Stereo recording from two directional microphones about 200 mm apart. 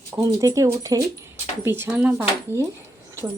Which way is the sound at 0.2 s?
15° right (ahead or behind).